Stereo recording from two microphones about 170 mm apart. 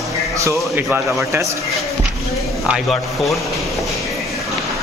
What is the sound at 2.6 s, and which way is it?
Speech, centre (ahead or behind).